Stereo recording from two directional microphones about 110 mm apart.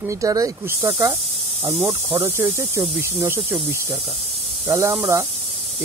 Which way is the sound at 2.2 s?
20° right (ahead or behind).